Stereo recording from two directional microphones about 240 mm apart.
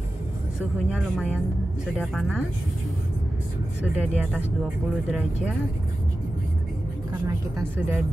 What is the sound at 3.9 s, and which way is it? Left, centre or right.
Speech, centre.